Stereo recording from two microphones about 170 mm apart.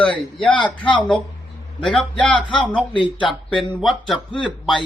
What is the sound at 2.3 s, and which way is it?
Speech, 30° left (ahead or behind).